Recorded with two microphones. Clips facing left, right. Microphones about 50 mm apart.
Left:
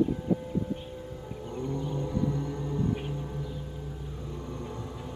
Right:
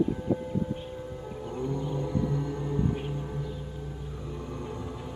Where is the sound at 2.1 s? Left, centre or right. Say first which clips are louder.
Even; centre.